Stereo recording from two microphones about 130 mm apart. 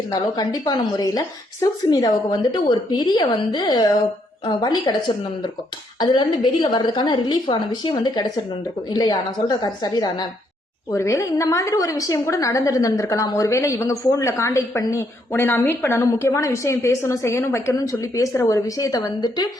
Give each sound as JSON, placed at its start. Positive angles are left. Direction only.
{"t": 0.1, "sound": "a woman's voice", "side_deg": 30}